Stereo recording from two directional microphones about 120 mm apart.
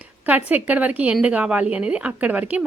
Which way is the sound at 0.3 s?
15° right (ahead or behind).